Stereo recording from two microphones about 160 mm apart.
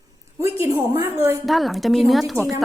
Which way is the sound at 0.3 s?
15° right (ahead or behind).